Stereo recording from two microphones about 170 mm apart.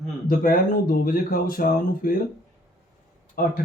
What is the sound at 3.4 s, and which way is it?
Speech, 60° left (ahead or behind).